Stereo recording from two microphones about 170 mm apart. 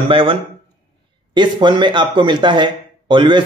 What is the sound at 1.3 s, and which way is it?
A man's voice, 25° right (ahead or behind).